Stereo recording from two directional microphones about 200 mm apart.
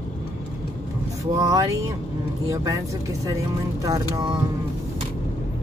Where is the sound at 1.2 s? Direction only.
15° right (ahead or behind).